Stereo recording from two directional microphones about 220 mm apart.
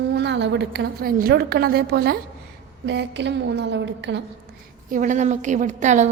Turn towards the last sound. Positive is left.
turn(degrees=-35)  # may be behind; listen again after turning